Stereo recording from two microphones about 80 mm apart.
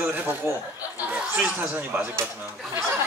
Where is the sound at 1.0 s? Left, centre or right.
Centre.